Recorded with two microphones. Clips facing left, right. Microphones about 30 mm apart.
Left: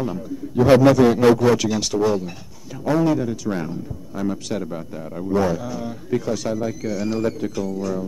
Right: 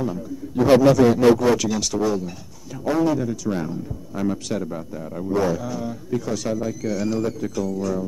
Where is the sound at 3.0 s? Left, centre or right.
Left.